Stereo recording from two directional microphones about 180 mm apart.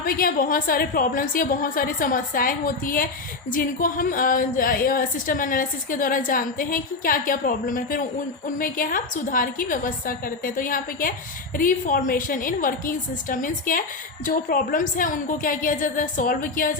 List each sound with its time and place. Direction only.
0.0 s a woman's voice: 50° left (ahead or behind)